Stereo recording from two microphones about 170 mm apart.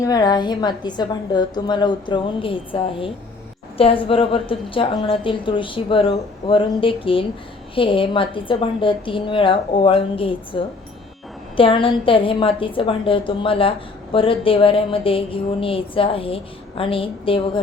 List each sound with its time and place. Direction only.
0.0 s a woman's voice: 20° left (ahead or behind)